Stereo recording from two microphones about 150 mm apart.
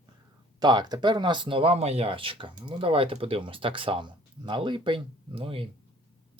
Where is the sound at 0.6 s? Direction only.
30° right (ahead or behind).